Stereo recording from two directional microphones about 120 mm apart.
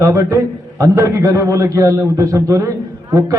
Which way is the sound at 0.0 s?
25° right (ahead or behind).